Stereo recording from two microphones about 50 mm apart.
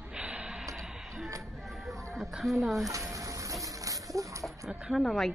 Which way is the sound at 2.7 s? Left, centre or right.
Right.